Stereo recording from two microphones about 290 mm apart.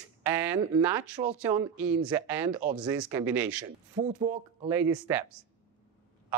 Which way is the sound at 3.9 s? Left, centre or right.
Centre.